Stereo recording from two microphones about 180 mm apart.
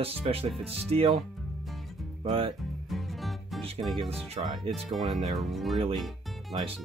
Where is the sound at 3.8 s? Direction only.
Centre (ahead or behind).